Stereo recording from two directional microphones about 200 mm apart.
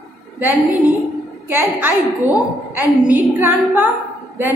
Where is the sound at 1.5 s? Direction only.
10° right (ahead or behind).